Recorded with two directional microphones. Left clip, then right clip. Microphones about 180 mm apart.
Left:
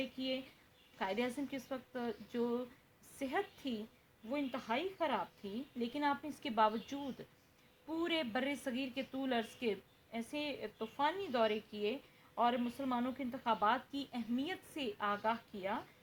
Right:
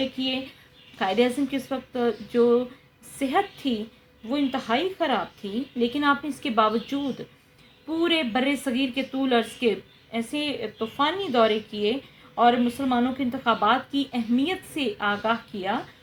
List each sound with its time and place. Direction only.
0.9 s a woman's voice: 40° left (ahead or behind)
7.9 s a woman's voice: 45° left (ahead or behind)